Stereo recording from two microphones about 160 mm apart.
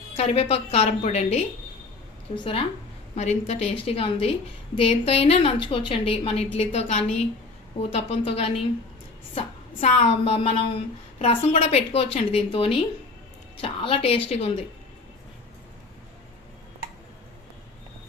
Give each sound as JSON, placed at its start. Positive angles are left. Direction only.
{"t": 0.2, "sound": "a woman's voice", "side_deg": 40}
{"t": 2.3, "sound": "a woman's voice", "side_deg": 35}
{"t": 9.8, "sound": "a woman's voice", "side_deg": 40}